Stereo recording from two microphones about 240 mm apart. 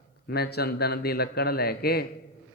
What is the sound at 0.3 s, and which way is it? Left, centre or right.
A man's voice, left.